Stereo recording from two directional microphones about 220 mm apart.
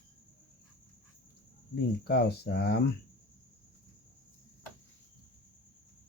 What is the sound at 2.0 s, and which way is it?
Speech, 50° left (ahead or behind).